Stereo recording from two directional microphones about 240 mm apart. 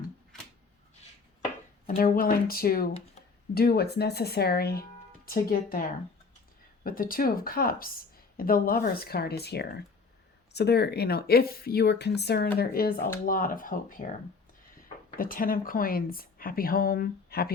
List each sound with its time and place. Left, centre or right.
2.0 s speech: left
15.1 s speech: left